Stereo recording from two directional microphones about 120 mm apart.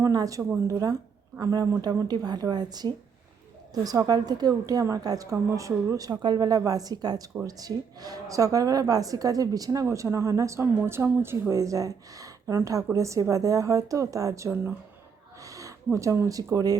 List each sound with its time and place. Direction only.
0.0 s a woman's voice: 30° right (ahead or behind)
15.4 s speech: 25° right (ahead or behind)